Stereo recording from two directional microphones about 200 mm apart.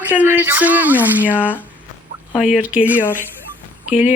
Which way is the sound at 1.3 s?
10° left (ahead or behind).